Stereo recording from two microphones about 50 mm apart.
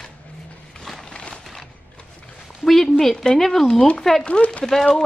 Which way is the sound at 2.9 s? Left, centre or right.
Centre.